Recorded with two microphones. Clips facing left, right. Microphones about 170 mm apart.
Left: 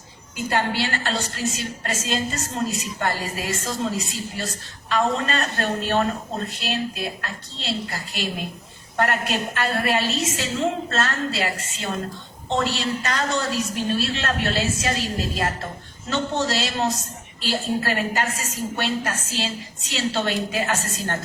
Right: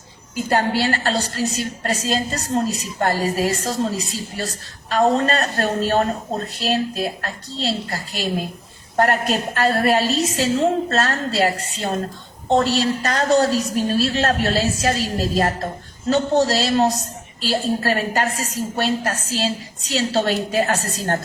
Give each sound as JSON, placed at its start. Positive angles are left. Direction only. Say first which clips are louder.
{"t": 0.5, "sound": "a woman's voice", "louder": "right 5 dB", "side_deg": -40}
{"t": 4.9, "sound": "a woman's voice", "louder": "right 5 dB", "side_deg": -40}